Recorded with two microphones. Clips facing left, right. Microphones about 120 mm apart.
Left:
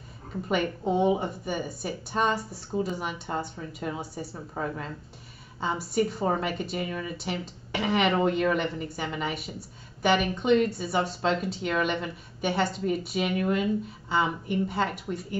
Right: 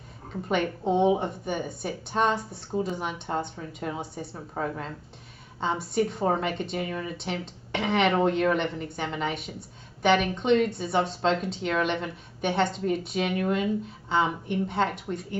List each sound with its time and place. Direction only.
0.5 s speech: 5° left (ahead or behind)